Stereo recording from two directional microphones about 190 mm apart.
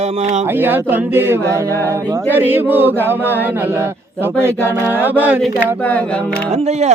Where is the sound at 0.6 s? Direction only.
10° right (ahead or behind).